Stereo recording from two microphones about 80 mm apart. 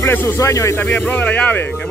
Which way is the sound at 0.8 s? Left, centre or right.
Centre.